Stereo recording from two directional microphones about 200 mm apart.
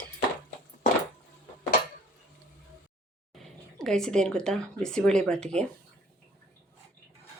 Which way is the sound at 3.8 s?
Centre (ahead or behind).